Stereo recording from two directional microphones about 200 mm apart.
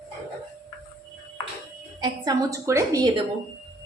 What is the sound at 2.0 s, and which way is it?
A woman's voice, 15° right (ahead or behind).